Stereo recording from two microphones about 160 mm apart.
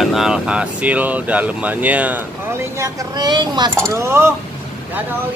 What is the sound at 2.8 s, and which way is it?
Speech, 25° right (ahead or behind).